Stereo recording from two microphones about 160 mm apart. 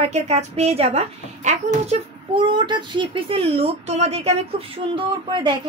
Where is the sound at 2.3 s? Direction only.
30° right (ahead or behind).